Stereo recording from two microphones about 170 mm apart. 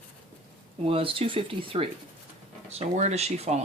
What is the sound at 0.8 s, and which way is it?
Speech, 30° right (ahead or behind).